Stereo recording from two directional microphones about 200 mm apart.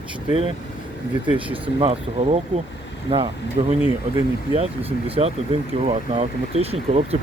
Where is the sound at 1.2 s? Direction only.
25° right (ahead or behind).